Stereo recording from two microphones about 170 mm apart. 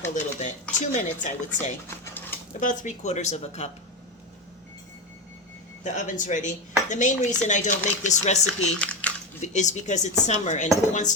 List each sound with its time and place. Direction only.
0.1 s a woman's voice: 45° left (ahead or behind)
5.8 s speech: 45° left (ahead or behind)
8.8 s a sound: 10° left (ahead or behind)
9.4 s speech: 45° left (ahead or behind)